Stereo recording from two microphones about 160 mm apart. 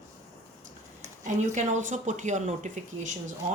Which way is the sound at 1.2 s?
50° right (ahead or behind).